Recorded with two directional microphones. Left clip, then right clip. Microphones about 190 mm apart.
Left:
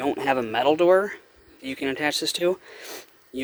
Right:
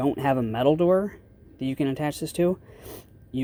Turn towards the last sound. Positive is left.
turn(degrees=25)  # may be behind; listen again after turning